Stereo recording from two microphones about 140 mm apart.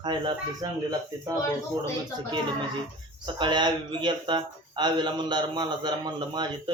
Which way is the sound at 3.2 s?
35° right (ahead or behind).